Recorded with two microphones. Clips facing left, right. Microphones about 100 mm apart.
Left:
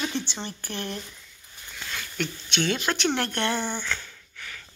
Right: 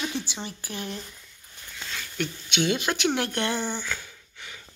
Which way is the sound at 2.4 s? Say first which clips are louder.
Right 1 dB; 10° right (ahead or behind).